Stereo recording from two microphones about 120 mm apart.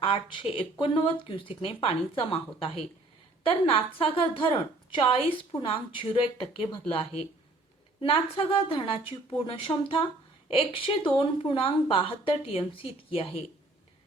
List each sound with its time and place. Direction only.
0.0 s a woman's voice: 50° left (ahead or behind)